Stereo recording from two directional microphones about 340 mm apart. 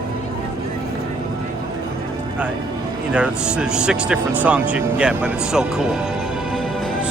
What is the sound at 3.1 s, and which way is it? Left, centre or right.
Speech, centre.